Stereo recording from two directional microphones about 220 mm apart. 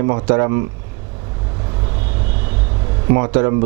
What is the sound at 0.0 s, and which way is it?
Speech, 15° right (ahead or behind).